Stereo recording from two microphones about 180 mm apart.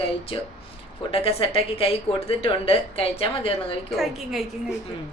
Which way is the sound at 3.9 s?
Centre (ahead or behind).